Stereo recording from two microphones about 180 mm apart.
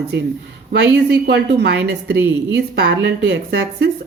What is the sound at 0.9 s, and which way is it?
A woman's voice, 70° right (ahead or behind).